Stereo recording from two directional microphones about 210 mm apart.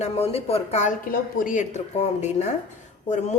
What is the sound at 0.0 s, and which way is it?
A woman's voice, 30° left (ahead or behind).